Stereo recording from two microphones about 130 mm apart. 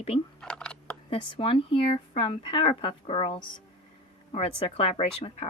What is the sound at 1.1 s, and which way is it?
Speech, 45° left (ahead or behind).